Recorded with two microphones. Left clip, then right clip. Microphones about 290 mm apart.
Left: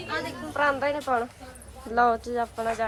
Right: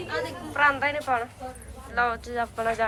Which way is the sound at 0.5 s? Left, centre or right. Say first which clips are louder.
Right 2 dB; centre.